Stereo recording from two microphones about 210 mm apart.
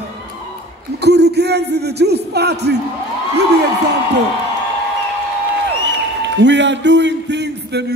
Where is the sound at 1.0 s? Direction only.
50° right (ahead or behind).